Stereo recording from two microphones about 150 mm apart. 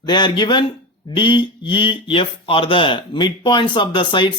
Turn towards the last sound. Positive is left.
turn(degrees=30)  # may be behind; listen again after turning